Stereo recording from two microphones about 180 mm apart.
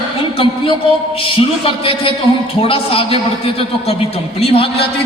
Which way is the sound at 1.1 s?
30° left (ahead or behind).